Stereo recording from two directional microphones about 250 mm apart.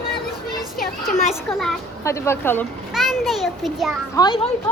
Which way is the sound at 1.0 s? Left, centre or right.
Left.